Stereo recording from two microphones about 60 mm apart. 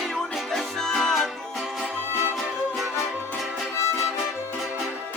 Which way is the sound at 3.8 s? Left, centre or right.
Left.